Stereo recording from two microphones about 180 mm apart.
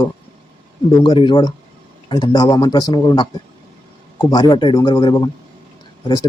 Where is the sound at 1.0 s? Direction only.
25° left (ahead or behind).